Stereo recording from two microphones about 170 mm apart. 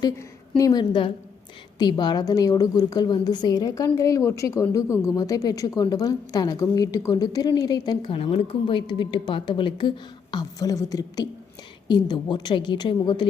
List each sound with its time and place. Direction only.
0.0 s a woman's voice: 20° left (ahead or behind)